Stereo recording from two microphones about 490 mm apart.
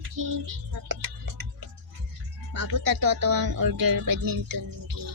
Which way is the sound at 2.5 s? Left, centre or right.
Right.